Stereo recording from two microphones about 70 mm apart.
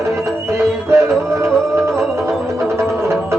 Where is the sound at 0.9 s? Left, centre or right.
Right.